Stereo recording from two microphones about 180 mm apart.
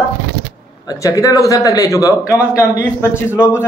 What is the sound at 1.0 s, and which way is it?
A man's voice, 20° left (ahead or behind).